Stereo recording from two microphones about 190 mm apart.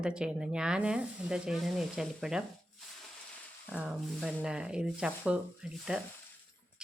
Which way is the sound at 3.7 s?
5° right (ahead or behind).